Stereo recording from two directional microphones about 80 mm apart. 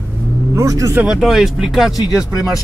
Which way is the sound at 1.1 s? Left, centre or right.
Centre.